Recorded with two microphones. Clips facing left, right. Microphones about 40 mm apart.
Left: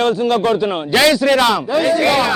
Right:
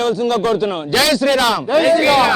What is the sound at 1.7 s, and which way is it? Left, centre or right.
Speech, right.